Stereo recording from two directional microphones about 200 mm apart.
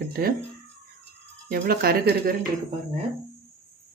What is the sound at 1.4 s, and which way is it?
Speech, 50° right (ahead or behind).